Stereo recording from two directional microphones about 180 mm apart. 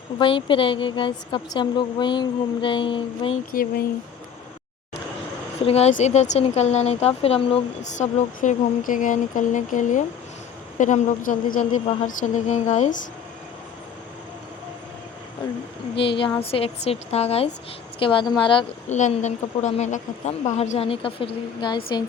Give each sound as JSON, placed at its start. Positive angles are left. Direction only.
{"t": 0.2, "sound": "a woman's voice", "side_deg": 25}
{"t": 3.5, "sound": "speech", "side_deg": 55}
{"t": 5.5, "sound": "speech", "side_deg": 35}
{"t": 16.0, "sound": "a woman's voice", "side_deg": 30}
{"t": 18.9, "sound": "a woman's voice", "side_deg": 40}